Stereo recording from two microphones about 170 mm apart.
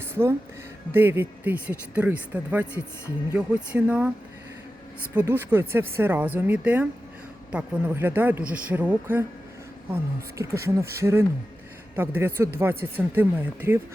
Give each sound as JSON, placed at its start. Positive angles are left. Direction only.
{"t": 0.0, "sound": "music", "side_deg": -15}
{"t": 0.9, "sound": "speech", "side_deg": -10}
{"t": 5.1, "sound": "speech", "side_deg": -10}